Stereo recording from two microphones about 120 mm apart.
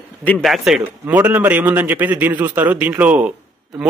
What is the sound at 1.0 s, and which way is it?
A man's voice, 15° right (ahead or behind).